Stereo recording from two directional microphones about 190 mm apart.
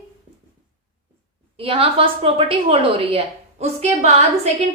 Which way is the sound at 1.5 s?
30° right (ahead or behind).